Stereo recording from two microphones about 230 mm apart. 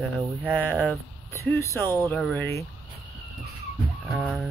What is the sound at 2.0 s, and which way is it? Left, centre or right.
Speech, centre.